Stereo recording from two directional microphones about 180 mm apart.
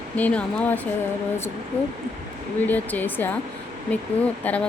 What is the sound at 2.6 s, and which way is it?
Speech, 10° left (ahead or behind).